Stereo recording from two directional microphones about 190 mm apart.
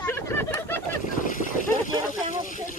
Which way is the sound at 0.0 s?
15° left (ahead or behind).